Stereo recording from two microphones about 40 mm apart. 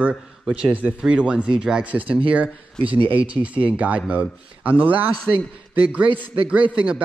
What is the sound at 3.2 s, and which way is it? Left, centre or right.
A man's voice, right.